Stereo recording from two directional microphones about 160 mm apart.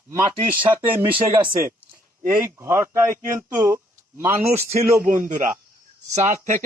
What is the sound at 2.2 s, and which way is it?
Speech, 15° right (ahead or behind).